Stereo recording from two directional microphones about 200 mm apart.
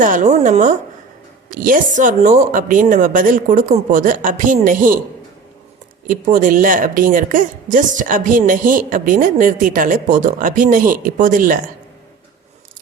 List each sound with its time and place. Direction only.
0.0 s speech: 40° right (ahead or behind)
6.1 s a woman's voice: 40° right (ahead or behind)